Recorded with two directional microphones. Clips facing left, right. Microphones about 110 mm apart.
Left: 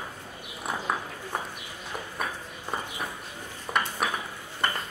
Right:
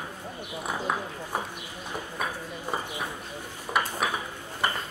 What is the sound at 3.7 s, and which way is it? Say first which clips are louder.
Dishes: right 1 dB; 5° left (ahead or behind).